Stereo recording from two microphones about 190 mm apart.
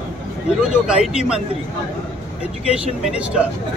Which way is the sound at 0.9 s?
5° right (ahead or behind).